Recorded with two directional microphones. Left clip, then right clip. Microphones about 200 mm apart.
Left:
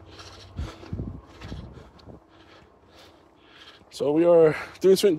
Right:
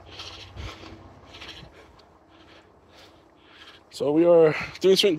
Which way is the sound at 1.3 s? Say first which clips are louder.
Right 2 dB; 20° left (ahead or behind).